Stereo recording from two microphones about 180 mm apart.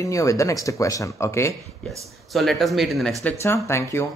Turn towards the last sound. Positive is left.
turn(degrees=15)  # may be behind; listen again after turning